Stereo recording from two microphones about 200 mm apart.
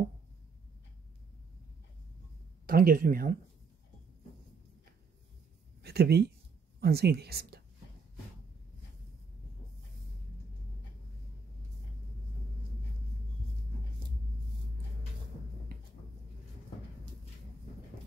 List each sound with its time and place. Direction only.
2.6 s speech: 45° right (ahead or behind)
5.8 s a woman's voice: 55° right (ahead or behind)